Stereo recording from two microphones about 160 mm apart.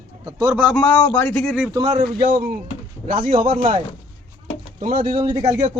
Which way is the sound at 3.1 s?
50° right (ahead or behind).